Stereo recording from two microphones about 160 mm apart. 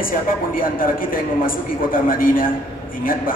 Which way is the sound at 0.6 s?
60° left (ahead or behind).